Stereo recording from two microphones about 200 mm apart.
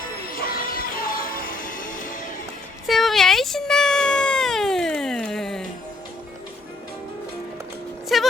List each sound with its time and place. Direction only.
0.3 s music: 45° left (ahead or behind)
2.8 s meow: centre (ahead or behind)
8.1 s a sound: centre (ahead or behind)